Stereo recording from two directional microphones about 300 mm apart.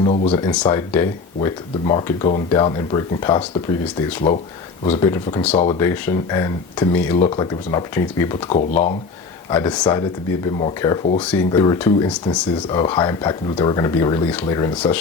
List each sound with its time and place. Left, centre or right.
0.0 s speech: centre
4.9 s speech: centre
8.4 s speech: left
9.5 s speech: centre